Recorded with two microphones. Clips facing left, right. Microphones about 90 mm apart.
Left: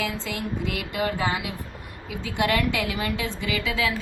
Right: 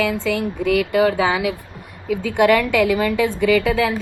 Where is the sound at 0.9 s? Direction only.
65° right (ahead or behind); by 1.5 s 90° right.